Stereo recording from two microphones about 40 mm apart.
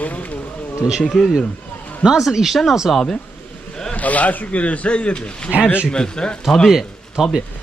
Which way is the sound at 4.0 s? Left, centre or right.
Left.